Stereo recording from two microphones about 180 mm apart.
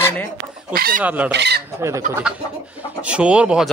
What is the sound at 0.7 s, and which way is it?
Speech, 55° right (ahead or behind).